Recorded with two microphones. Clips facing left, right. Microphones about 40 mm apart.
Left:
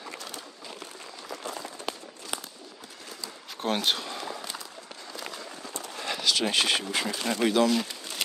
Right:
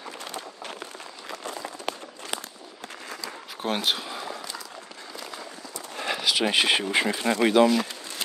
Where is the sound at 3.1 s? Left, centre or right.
Right.